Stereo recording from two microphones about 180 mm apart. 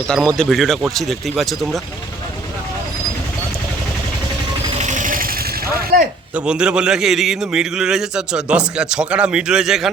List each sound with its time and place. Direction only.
0.1 s a man's voice: 5° left (ahead or behind)
4.8 s a sound: 45° right (ahead or behind)
6.3 s a man's voice: 5° right (ahead or behind)